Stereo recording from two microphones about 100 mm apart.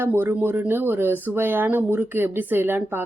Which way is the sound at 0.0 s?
20° right (ahead or behind).